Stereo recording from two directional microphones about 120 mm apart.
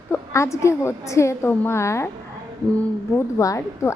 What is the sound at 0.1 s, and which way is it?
A woman's voice, 25° left (ahead or behind).